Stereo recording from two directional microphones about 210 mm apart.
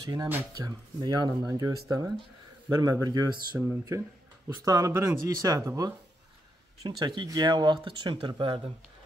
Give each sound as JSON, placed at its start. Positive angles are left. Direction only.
{"t": 0.0, "sound": "speech", "side_deg": -15}